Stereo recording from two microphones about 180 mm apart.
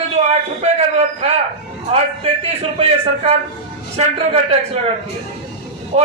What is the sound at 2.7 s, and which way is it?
A man's voice, 35° right (ahead or behind).